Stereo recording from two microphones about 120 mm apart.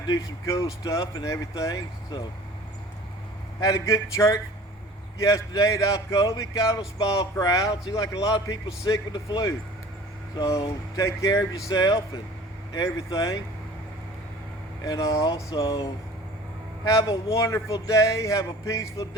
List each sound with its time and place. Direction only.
0.1 s speech: 25° left (ahead or behind)
3.6 s speech: 25° left (ahead or behind)
14.8 s speech: 25° left (ahead or behind)